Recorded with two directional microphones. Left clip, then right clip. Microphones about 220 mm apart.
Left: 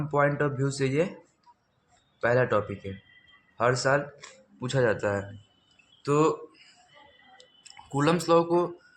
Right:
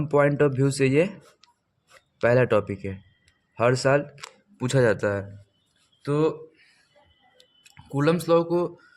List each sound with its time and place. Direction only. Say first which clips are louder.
0.0 s speech: right 5 dB; 50° right (ahead or behind)
2.2 s speech: right 4 dB; 50° right (ahead or behind)
6.0 s a sound: even; 45° right (ahead or behind)
7.6 s speech: right 2 dB; 50° right (ahead or behind)